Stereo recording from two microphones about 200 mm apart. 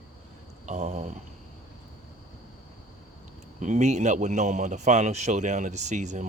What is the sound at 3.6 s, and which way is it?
A man's voice, 35° right (ahead or behind).